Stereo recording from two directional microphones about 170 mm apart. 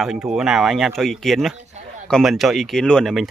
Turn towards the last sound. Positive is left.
turn(degrees=5)  # may be behind; listen again after turning